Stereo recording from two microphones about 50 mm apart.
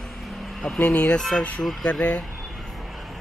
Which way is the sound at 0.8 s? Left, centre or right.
Left.